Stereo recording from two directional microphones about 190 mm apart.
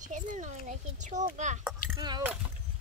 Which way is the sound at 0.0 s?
40° right (ahead or behind).